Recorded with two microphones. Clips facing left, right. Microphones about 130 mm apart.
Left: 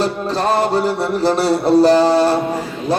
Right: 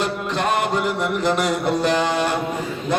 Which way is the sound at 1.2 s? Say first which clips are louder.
Left 6 dB; 35° left (ahead or behind).